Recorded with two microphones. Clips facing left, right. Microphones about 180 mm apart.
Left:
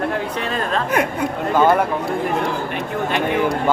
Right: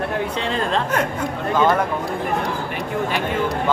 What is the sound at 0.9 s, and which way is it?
Speech, 10° left (ahead or behind).